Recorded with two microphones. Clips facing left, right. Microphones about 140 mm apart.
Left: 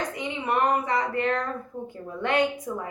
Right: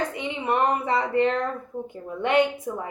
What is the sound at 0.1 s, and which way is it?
A woman's voice, 25° right (ahead or behind).